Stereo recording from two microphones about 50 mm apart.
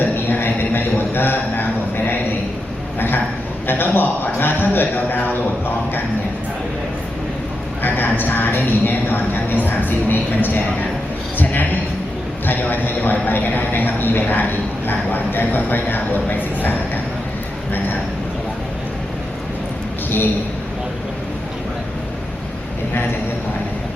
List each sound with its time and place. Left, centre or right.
0.0 s a sound: left
3.7 s a man's voice: left
7.8 s a man's voice: left
11.3 s a sound: left
12.5 s a man's voice: left
20.1 s a woman's voice: left